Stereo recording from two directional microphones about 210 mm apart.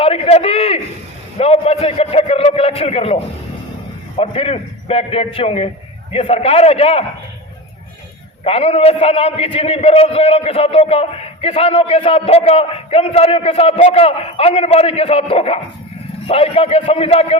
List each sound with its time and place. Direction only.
0.0 s a sound: 30° left (ahead or behind)
1.4 s a man's voice: 30° left (ahead or behind)
8.4 s a man's voice: 30° left (ahead or behind)